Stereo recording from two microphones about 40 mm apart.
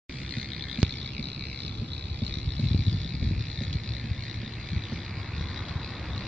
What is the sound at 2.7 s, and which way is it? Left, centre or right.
Vehicle, centre.